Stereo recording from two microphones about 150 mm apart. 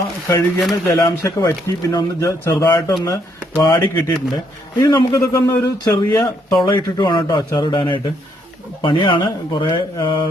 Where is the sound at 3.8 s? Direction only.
25° left (ahead or behind).